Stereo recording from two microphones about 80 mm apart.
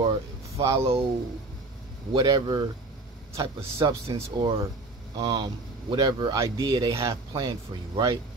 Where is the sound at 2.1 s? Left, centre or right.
Right.